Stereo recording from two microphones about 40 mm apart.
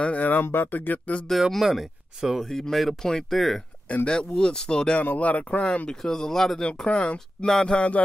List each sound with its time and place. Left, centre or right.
0.0 s speech: left
0.4 s speech: left
1.3 s speech: centre
2.5 s speech: centre
4.1 s speech: left
5.0 s speech: left
5.9 s speech: centre
6.6 s speech: left